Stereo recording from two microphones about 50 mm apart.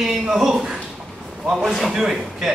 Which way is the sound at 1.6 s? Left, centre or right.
Centre.